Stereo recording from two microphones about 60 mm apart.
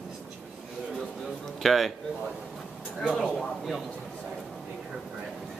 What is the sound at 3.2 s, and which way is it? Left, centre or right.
Speech, centre.